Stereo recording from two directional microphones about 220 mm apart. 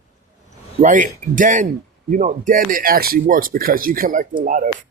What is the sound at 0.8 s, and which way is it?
Speech, 35° right (ahead or behind).